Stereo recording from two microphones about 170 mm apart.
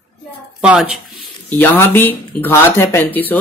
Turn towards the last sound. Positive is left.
turn(degrees=10)  # may be behind; listen again after turning